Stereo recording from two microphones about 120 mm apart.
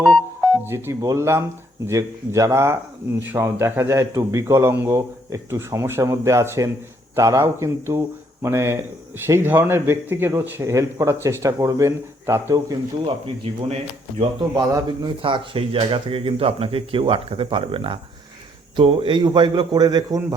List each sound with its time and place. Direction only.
0.6 s a man's voice: 20° right (ahead or behind)
13.1 s speech: 50° right (ahead or behind)
14.5 s a man's voice: 35° right (ahead or behind)
15.2 s a man's voice: 50° right (ahead or behind); by 20.2 s 30° right (ahead or behind)